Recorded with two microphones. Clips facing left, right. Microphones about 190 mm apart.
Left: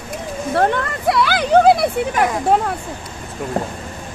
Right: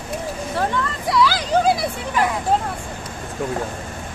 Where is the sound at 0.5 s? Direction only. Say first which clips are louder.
Left 6 dB; 60° left (ahead or behind).